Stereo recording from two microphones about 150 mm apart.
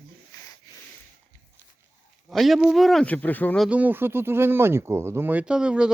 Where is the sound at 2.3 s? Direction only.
Centre (ahead or behind).